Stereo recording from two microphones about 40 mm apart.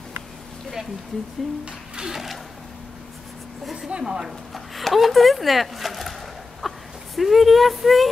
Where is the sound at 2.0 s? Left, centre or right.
Centre.